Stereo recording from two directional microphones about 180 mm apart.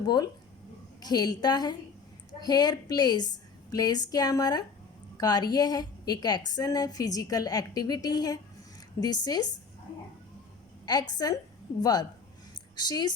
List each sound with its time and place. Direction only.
0.0 s a woman's voice: 20° left (ahead or behind)
11.1 s a woman's voice: 20° left (ahead or behind)